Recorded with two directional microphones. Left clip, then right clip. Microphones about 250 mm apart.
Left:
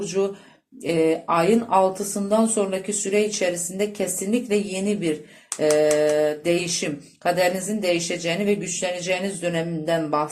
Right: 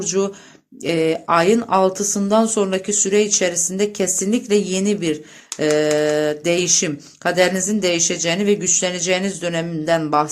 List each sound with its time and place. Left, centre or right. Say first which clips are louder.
0.9 s speech: right 3 dB; right